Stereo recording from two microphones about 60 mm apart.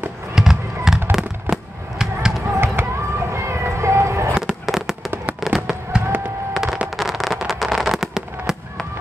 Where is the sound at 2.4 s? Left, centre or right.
Right.